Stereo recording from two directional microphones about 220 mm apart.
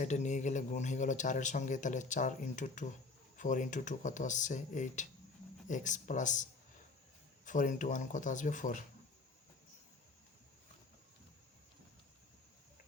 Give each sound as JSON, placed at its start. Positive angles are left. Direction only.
{"t": 0.0, "sound": "speech", "side_deg": 35}